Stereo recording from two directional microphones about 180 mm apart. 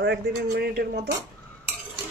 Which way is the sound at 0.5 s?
60° right (ahead or behind).